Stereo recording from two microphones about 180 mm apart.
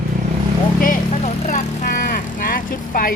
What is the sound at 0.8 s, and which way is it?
Vehicle, 45° left (ahead or behind).